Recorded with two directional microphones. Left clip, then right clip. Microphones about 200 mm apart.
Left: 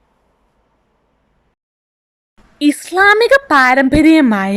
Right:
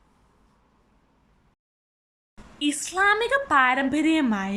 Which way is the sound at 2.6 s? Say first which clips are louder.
Left 11 dB; 40° left (ahead or behind).